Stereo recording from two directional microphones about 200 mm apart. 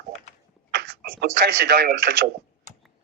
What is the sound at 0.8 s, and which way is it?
Speech, 55° right (ahead or behind).